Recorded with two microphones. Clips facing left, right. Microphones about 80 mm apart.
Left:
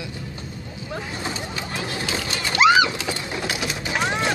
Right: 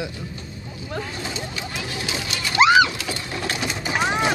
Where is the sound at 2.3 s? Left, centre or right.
Left.